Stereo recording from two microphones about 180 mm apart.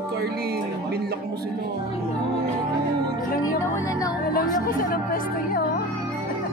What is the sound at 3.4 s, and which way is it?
Music, 15° left (ahead or behind).